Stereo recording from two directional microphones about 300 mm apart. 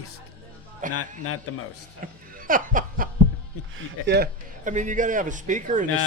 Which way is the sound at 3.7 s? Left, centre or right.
Right.